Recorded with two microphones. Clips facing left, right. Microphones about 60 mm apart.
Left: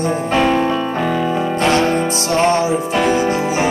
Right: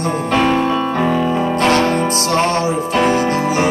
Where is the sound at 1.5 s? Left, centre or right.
Right.